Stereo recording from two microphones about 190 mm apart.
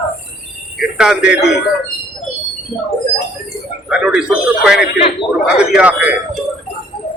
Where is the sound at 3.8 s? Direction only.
5° right (ahead or behind).